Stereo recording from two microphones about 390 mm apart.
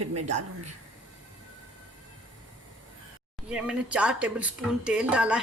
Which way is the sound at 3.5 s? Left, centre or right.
Centre.